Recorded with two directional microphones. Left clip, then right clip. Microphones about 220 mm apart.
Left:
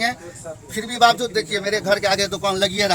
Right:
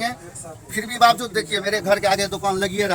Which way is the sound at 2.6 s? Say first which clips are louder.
Left 3 dB; 45° left (ahead or behind).